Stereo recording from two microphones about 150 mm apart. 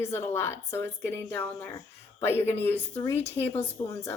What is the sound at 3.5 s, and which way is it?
Speech, 40° left (ahead or behind).